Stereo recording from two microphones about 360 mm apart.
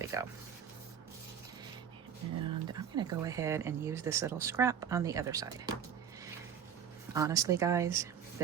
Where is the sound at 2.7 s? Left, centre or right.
Centre.